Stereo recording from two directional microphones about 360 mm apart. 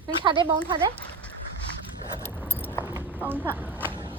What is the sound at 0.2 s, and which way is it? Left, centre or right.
Speech, centre.